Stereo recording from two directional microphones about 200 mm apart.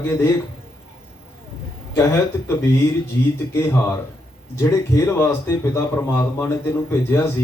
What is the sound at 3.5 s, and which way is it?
Speech, 15° left (ahead or behind).